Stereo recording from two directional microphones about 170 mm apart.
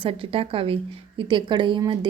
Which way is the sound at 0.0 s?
35° right (ahead or behind).